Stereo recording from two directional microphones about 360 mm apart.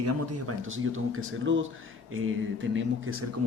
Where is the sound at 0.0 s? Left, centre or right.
Right.